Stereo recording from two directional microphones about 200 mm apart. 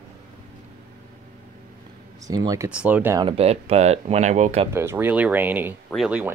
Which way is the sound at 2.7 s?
5° right (ahead or behind).